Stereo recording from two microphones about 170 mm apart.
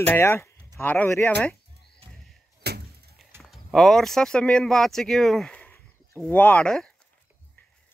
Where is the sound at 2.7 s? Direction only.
70° right (ahead or behind).